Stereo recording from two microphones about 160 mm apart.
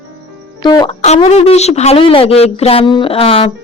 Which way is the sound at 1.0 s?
45° left (ahead or behind).